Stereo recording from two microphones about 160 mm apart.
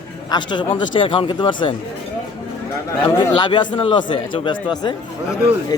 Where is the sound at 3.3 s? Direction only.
30° left (ahead or behind).